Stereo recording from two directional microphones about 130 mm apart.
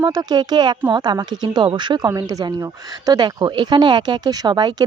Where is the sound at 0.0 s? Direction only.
30° right (ahead or behind).